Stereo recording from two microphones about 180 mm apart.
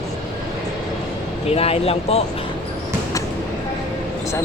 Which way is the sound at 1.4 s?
35° left (ahead or behind).